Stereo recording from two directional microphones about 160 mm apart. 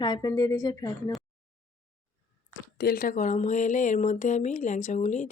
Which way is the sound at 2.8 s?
65° left (ahead or behind).